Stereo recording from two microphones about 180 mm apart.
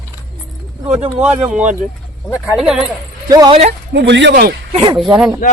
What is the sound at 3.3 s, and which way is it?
Speech, 25° right (ahead or behind).